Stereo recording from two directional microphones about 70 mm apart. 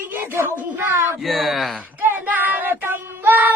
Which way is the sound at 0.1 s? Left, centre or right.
Right.